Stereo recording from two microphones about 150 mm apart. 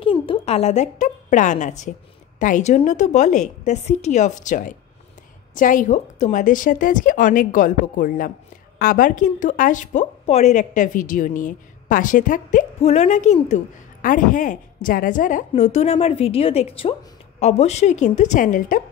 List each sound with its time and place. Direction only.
0.0 s a woman's voice: 35° left (ahead or behind); by 10.0 s 60° left (ahead or behind)
10.2 s a woman's voice: 45° left (ahead or behind)
14.0 s a woman's voice: 60° left (ahead or behind)